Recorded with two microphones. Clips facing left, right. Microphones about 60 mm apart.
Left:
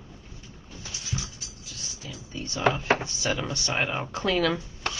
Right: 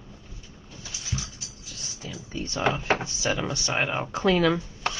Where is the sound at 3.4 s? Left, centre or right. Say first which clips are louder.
Right 2 dB; centre.